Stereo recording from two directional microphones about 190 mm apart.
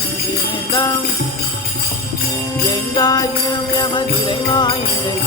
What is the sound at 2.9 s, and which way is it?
Jingle bell, 20° left (ahead or behind).